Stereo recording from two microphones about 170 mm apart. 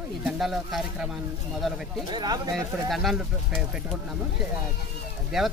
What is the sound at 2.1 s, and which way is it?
Speech, 25° right (ahead or behind).